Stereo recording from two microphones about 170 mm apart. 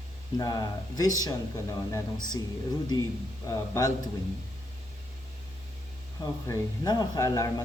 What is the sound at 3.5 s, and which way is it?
Speech, 20° left (ahead or behind).